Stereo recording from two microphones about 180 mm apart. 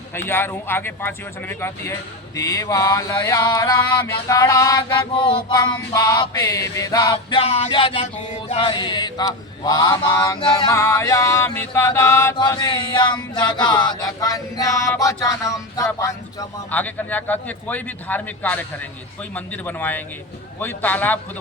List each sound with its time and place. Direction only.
0.1 s a man's voice: 10° left (ahead or behind)